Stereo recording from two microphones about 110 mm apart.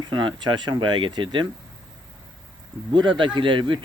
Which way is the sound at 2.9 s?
45° right (ahead or behind).